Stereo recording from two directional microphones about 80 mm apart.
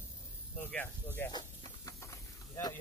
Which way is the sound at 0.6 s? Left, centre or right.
Left.